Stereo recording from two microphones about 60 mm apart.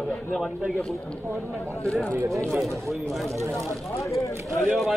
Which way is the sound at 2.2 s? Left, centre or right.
Right.